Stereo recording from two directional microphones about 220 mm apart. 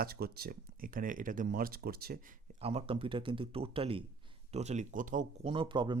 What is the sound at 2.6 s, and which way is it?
Speech, 25° right (ahead or behind).